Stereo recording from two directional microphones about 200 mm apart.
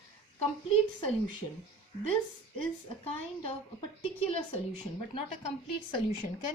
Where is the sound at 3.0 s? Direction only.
30° left (ahead or behind).